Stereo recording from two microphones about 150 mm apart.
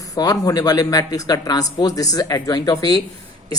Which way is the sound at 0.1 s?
25° left (ahead or behind).